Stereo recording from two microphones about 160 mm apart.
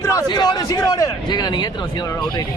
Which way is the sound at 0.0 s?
25° left (ahead or behind).